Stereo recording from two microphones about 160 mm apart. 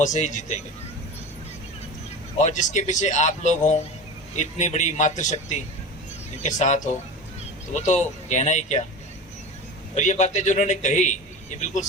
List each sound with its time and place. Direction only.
0.0 s speech: 50° left (ahead or behind)
2.4 s speech: 50° left (ahead or behind)
9.9 s speech: 50° left (ahead or behind)